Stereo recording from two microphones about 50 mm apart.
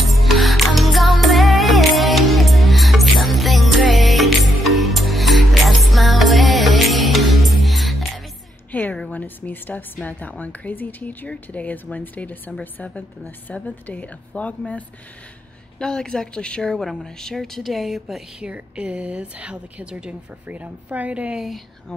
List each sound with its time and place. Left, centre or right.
0.0 s music: centre
8.7 s a sound: left
10.0 s a woman's voice: left
13.7 s a woman's voice: left
15.8 s a woman's voice: centre
16.8 s a woman's voice: centre
18.5 s a woman's voice: right
20.4 s a woman's voice: right